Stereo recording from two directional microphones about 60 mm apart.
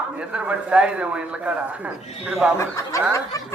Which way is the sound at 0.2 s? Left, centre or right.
Centre.